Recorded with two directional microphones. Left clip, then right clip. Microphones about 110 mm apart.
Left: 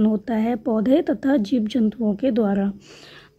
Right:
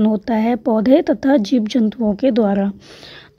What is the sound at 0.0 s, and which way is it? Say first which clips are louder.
A woman's voice: right 5 dB; 30° right (ahead or behind).